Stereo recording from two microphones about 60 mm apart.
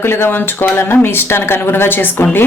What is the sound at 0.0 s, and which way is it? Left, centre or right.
A woman's voice, left.